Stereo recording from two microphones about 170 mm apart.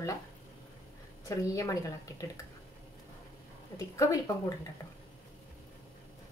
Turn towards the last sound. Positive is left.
turn(degrees=20)  # may be behind; listen again after turning